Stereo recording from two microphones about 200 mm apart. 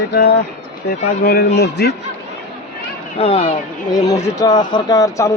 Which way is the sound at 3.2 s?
30° left (ahead or behind).